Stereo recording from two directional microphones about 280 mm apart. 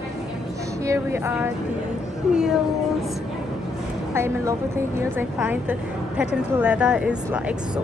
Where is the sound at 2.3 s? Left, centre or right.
Centre.